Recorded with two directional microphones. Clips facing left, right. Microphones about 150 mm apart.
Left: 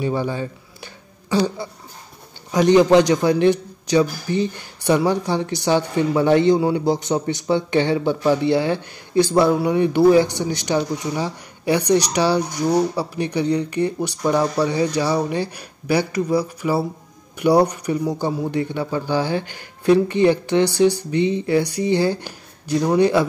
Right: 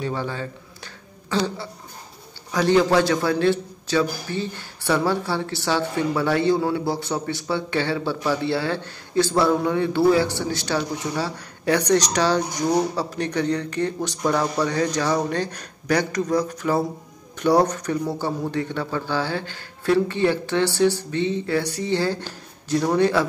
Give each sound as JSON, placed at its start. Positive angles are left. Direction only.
{"t": 0.0, "sound": "a man's voice", "side_deg": 15}
{"t": 1.3, "sound": "a sound", "side_deg": 10}
{"t": 2.5, "sound": "a man's voice", "side_deg": 20}